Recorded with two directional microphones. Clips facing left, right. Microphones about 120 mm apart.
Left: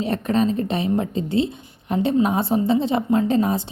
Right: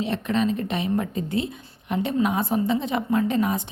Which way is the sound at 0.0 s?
40° left (ahead or behind).